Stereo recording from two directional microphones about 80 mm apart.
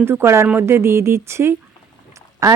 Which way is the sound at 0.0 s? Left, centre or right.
Right.